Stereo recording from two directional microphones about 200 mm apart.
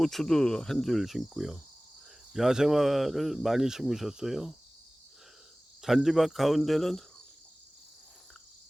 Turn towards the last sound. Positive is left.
turn(degrees=0)  # may be behind; listen again after turning